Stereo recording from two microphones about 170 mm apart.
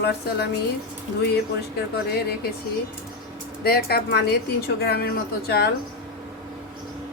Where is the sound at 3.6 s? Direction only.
65° left (ahead or behind).